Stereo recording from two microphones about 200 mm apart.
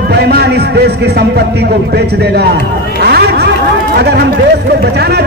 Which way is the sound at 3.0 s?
55° right (ahead or behind).